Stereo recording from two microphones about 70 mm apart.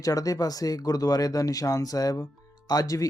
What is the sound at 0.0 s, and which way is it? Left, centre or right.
Speech, left.